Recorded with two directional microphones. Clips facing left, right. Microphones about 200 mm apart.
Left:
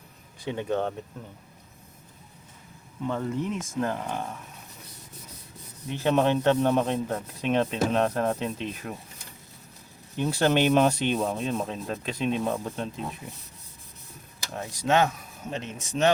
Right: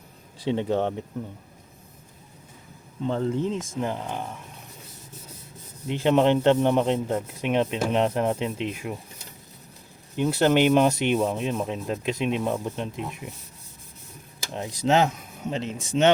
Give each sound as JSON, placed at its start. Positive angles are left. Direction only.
{"t": 0.4, "sound": "speech", "side_deg": -25}
{"t": 3.1, "sound": "speech", "side_deg": -25}
{"t": 3.8, "sound": "sanding", "side_deg": -15}
{"t": 5.9, "sound": "sanding", "side_deg": -15}
{"t": 10.2, "sound": "sanding", "side_deg": -10}
{"t": 14.5, "sound": "speech", "side_deg": -20}
{"t": 15.4, "sound": "a man's voice", "side_deg": -30}